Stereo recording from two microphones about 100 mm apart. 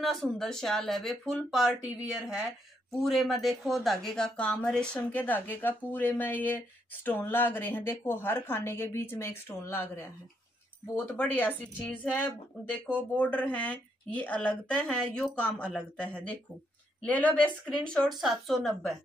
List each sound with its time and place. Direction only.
0.0 s a woman's voice: centre (ahead or behind)